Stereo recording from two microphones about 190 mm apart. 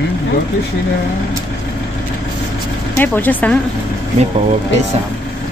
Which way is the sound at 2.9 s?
10° left (ahead or behind).